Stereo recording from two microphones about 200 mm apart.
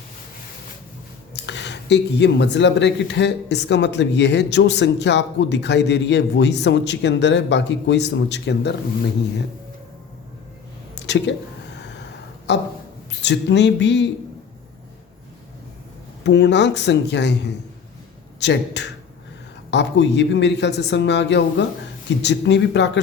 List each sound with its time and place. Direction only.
1.3 s speech: 60° left (ahead or behind)
10.9 s a sound: 60° left (ahead or behind)
12.5 s speech: 60° left (ahead or behind)
16.2 s speech: 60° left (ahead or behind)